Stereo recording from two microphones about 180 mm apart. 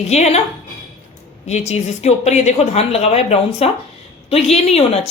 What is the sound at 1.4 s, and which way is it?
Speech, 40° left (ahead or behind).